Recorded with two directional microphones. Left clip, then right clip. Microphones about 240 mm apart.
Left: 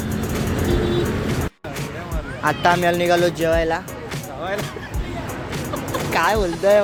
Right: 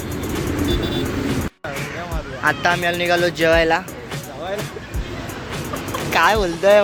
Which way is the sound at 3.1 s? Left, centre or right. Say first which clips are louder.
Right 1 dB; centre.